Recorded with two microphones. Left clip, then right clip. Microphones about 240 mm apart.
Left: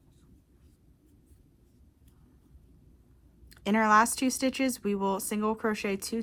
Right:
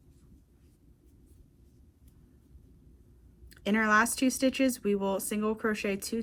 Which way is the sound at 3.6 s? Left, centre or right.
Left.